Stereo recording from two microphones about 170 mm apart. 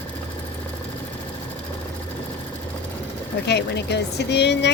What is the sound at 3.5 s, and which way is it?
Speech, 80° left.